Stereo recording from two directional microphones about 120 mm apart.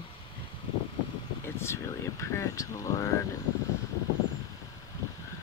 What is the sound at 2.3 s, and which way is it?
Speech, 25° left (ahead or behind).